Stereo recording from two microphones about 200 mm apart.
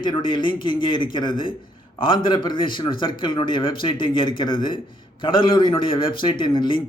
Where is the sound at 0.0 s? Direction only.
25° left (ahead or behind).